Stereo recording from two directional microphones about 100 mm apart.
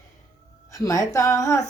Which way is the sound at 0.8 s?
30° left (ahead or behind).